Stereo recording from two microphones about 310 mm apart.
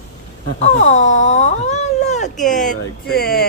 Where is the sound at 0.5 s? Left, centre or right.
Left.